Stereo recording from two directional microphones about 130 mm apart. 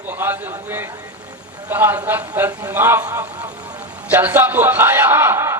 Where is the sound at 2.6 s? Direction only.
15° right (ahead or behind).